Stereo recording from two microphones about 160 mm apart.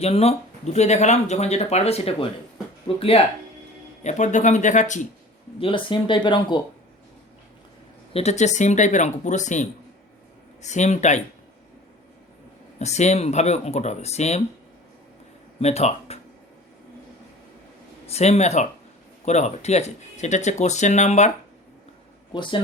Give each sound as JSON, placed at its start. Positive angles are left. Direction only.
{"t": 0.0, "sound": "speech", "side_deg": 40}
{"t": 4.0, "sound": "speech", "side_deg": 50}
{"t": 5.5, "sound": "speech", "side_deg": 35}
{"t": 8.1, "sound": "speech", "side_deg": 45}
{"t": 12.8, "sound": "speech", "side_deg": 45}
{"t": 15.6, "sound": "speech", "side_deg": 40}
{"t": 18.0, "sound": "speech", "side_deg": 40}
{"t": 22.3, "sound": "speech", "side_deg": 30}